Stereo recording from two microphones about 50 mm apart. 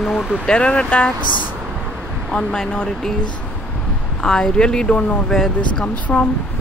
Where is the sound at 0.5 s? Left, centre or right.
Left.